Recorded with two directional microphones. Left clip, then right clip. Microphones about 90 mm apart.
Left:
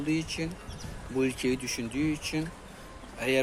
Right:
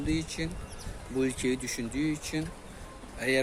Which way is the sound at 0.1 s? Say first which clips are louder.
Left 2 dB; 5° left (ahead or behind).